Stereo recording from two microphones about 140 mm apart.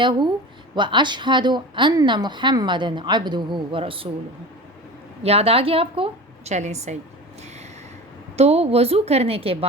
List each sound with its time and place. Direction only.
0.0 s speech: 30° right (ahead or behind)
5.2 s a woman's voice: 45° right (ahead or behind)
8.4 s a woman's voice: 50° right (ahead or behind)